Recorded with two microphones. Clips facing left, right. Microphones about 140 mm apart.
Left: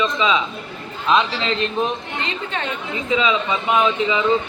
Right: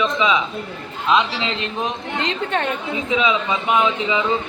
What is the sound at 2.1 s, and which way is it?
Speech, 75° right (ahead or behind).